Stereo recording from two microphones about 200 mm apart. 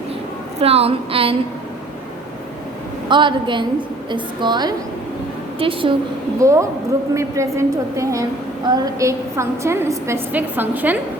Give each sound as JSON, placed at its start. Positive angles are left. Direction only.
{"t": 0.6, "sound": "a woman's voice", "side_deg": -30}
{"t": 3.1, "sound": "a woman's voice", "side_deg": -25}
{"t": 6.4, "sound": "a woman's voice", "side_deg": -15}